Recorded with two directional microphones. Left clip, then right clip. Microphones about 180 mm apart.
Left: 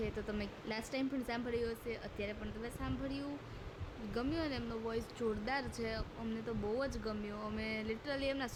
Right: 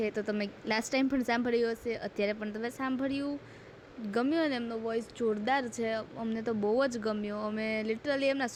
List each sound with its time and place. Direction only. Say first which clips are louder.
0.0 s a woman's voice: right 9 dB; 35° right (ahead or behind)